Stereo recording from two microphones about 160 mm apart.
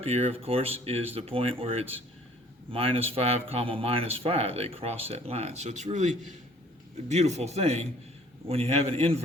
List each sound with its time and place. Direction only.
0.0 s speech: 40° right (ahead or behind)
7.1 s speech: 45° right (ahead or behind)